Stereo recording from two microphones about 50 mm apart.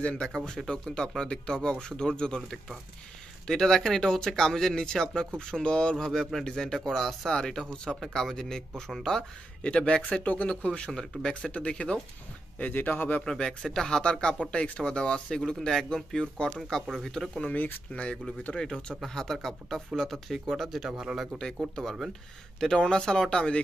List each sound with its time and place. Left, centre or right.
0.7 s speech: centre
9.6 s speech: left
12.7 s a man's voice: left
13.2 s speech: centre
17.5 s a man's voice: left
17.9 s speech: left
19.0 s speech: centre
20.9 s a man's voice: centre
22.6 s speech: centre